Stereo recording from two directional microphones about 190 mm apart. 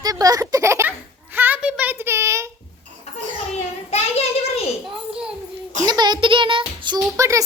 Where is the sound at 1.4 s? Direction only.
10° right (ahead or behind).